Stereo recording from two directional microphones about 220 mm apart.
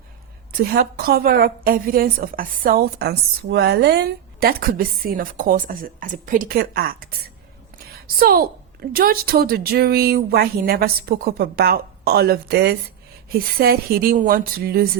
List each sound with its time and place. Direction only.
0.6 s a woman's voice: 45° right (ahead or behind)